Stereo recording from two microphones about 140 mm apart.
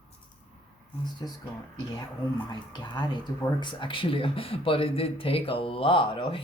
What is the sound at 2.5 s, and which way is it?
Speech, 30° left (ahead or behind).